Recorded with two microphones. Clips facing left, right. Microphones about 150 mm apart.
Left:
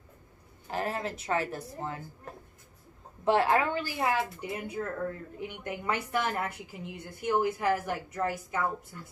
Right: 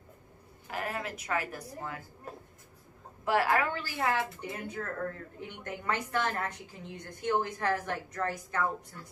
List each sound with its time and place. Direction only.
0.7 s a woman's voice: 30° left (ahead or behind)
3.3 s speech: 25° left (ahead or behind)